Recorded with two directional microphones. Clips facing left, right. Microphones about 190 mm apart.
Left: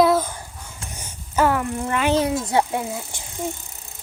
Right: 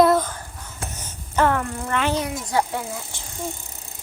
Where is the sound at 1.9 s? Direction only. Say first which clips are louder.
Left 2 dB; 10° left (ahead or behind).